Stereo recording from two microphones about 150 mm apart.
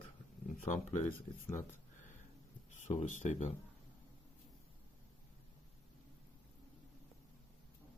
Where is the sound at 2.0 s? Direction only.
55° left (ahead or behind).